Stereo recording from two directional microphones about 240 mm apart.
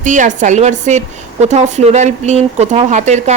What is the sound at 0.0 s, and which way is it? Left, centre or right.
A woman's voice, right.